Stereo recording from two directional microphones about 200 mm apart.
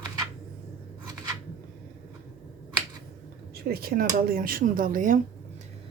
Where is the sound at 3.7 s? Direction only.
50° right (ahead or behind).